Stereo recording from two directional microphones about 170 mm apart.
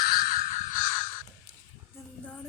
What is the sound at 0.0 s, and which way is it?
Crow, 65° left (ahead or behind).